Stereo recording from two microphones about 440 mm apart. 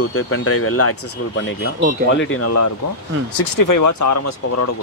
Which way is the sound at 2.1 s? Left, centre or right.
Left.